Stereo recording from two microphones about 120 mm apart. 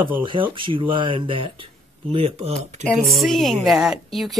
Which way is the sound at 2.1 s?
55° right (ahead or behind).